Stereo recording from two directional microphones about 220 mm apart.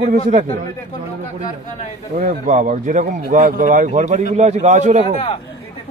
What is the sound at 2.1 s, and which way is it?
Speech, 35° right (ahead or behind).